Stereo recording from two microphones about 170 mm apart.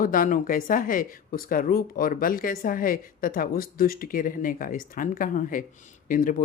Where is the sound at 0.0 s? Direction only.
55° left (ahead or behind).